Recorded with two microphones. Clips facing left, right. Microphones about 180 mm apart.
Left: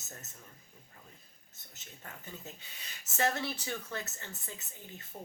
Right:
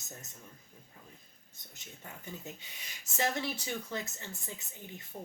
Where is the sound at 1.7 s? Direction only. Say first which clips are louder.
Right 1 dB; 15° right (ahead or behind).